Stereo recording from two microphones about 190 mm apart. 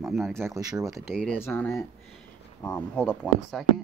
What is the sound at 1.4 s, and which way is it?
Speech, 15° left (ahead or behind).